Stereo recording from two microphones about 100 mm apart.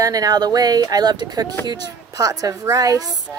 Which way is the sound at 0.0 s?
35° right (ahead or behind).